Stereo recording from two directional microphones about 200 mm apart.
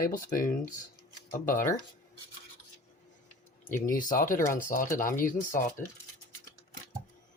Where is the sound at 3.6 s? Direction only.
40° left (ahead or behind).